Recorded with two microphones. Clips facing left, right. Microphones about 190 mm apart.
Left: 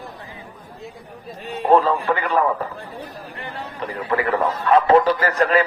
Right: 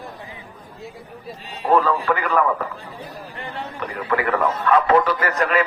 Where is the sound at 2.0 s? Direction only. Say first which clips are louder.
Even; 30° left (ahead or behind).